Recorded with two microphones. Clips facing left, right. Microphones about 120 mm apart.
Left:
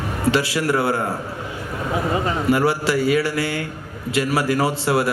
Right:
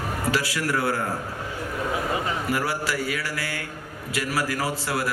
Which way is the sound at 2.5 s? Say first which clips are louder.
Left 10 dB; 25° left (ahead or behind).